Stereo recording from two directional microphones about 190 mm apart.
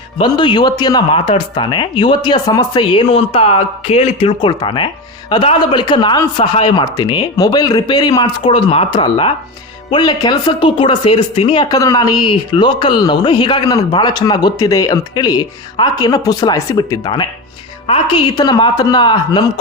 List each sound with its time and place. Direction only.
0.2 s speech: 25° left (ahead or behind)